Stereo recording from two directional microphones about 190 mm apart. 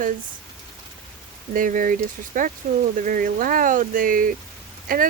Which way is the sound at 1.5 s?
45° right (ahead or behind).